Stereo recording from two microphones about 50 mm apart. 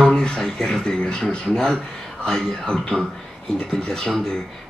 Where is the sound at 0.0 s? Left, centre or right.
Centre.